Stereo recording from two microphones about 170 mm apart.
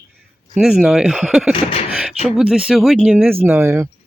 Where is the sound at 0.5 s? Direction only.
5° right (ahead or behind).